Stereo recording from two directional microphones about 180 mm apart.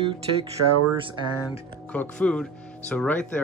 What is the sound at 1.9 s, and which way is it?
Speech, 5° left (ahead or behind).